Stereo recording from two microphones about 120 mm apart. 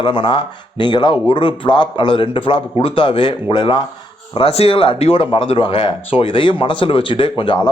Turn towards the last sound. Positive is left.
turn(degrees=45)  # may be behind; listen again after turning